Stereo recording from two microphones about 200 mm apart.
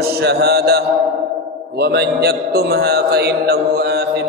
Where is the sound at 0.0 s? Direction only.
50° right (ahead or behind).